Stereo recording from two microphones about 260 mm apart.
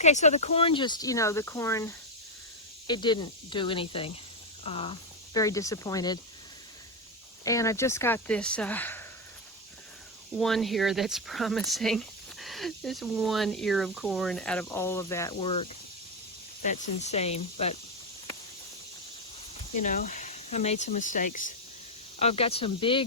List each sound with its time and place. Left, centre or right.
0.0 s speech: left
7.4 s speech: centre
10.3 s speech: centre; by 17.7 s left
19.7 s speech: left